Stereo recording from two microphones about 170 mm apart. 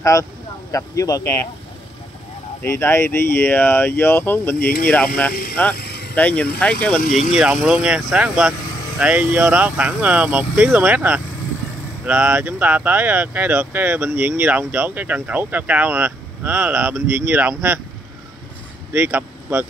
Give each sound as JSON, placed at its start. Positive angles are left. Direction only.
{"t": 0.0, "sound": "speech", "side_deg": 20}
{"t": 2.6, "sound": "speech", "side_deg": 15}
{"t": 4.6, "sound": "speech", "side_deg": 65}
{"t": 4.8, "sound": "speech", "side_deg": 10}
{"t": 5.3, "sound": "speech", "side_deg": 60}
{"t": 5.8, "sound": "vehicle", "side_deg": 75}
{"t": 6.1, "sound": "speech", "side_deg": 10}
{"t": 7.0, "sound": "speech", "side_deg": 50}
{"t": 7.2, "sound": "speech", "side_deg": -5}
{"t": 18.9, "sound": "speech", "side_deg": -10}